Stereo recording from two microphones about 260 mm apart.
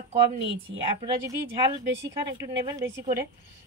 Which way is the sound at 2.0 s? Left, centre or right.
Centre.